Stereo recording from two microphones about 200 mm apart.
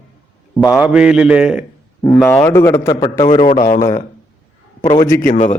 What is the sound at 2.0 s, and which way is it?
A man's voice, 10° left (ahead or behind).